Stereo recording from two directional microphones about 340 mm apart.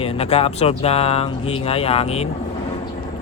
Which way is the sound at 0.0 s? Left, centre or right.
Centre.